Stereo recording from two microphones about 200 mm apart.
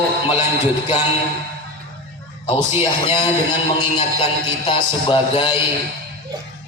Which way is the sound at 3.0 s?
25° left (ahead or behind).